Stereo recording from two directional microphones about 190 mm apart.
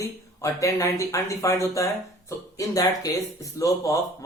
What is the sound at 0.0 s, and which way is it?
Speech, 15° left (ahead or behind).